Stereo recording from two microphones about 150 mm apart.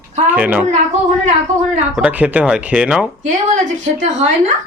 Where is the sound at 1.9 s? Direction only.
10° right (ahead or behind).